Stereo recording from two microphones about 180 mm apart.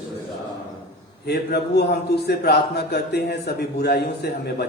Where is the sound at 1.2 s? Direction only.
65° left (ahead or behind).